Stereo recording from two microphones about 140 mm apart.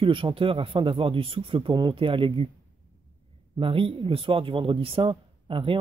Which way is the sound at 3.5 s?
40° right (ahead or behind).